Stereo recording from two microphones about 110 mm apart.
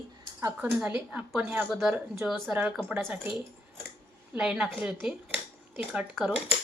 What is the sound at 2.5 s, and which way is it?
Speech, 5° right (ahead or behind).